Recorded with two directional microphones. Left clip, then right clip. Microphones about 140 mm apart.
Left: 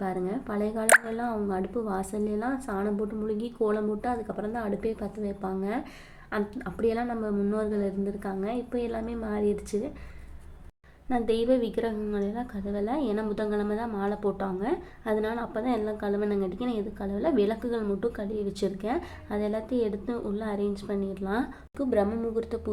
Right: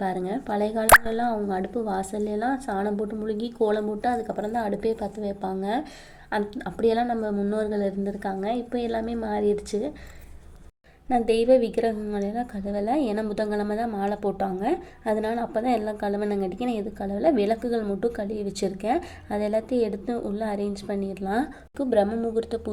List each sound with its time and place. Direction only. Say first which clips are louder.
0.0 s a woman's voice: right 3 dB; 20° right (ahead or behind)
11.1 s a woman's voice: right 6 dB; 25° right (ahead or behind)